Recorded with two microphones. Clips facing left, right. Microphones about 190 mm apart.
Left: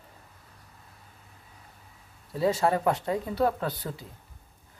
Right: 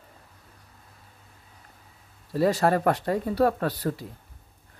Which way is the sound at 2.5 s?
65° right (ahead or behind).